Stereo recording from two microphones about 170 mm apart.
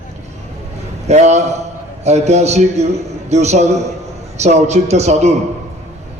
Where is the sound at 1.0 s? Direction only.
40° right (ahead or behind).